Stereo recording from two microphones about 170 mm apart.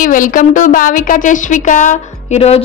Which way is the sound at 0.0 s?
50° left (ahead or behind).